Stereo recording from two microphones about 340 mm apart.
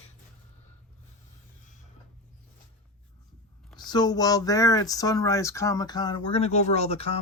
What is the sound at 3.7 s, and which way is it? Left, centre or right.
Speech, centre.